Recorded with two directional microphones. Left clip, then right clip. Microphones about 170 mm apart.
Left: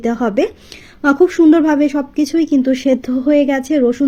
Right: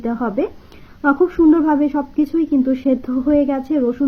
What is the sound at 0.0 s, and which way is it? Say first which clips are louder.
Speech: left 5 dB; 35° left (ahead or behind).